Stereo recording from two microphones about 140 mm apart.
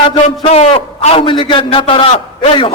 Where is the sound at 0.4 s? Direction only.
45° left (ahead or behind).